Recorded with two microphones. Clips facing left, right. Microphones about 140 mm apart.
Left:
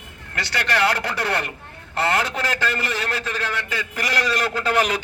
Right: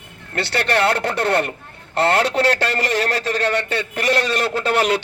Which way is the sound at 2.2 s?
75° right (ahead or behind).